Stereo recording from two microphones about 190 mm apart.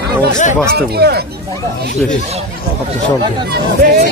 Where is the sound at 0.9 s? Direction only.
55° right (ahead or behind).